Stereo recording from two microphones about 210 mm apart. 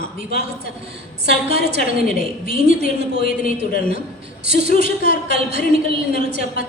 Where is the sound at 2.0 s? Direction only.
40° left (ahead or behind).